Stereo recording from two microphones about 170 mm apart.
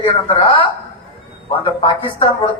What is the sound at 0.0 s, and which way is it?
Speech, 30° left (ahead or behind).